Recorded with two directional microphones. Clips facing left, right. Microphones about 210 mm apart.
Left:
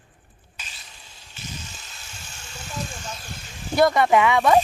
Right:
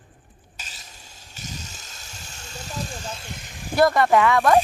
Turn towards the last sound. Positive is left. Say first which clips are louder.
# even
turn(degrees=0)  # may be behind; listen again after turning